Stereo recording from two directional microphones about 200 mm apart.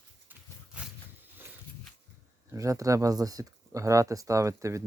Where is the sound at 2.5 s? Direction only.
15° right (ahead or behind).